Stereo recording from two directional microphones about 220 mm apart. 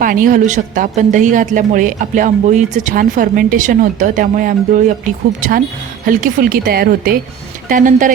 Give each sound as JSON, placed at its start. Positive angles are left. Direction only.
{"t": 0.0, "sound": "speech", "side_deg": -40}